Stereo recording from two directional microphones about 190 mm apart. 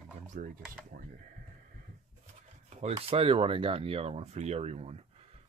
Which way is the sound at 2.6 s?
30° right (ahead or behind).